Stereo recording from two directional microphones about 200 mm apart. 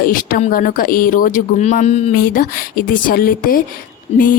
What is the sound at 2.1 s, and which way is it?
Speech, 45° left (ahead or behind).